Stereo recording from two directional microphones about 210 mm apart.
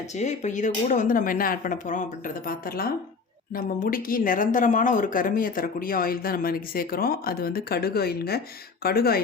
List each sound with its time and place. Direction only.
0.0 s speech: 35° left (ahead or behind)